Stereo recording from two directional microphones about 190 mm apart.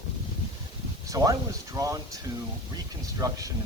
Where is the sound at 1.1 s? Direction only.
15° right (ahead or behind).